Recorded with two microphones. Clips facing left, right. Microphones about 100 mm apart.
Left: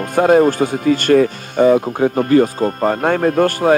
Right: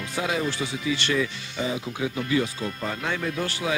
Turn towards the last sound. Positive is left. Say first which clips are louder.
# left 14 dB
turn(degrees=50)  # may be behind; listen again after turning